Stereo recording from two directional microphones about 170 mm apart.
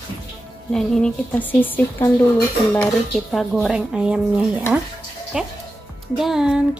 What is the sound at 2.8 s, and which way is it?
Speech, centre (ahead or behind).